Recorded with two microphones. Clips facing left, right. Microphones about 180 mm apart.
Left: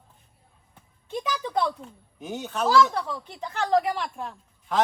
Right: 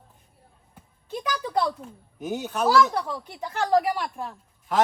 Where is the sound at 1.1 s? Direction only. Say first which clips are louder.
Right 1 dB; centre (ahead or behind).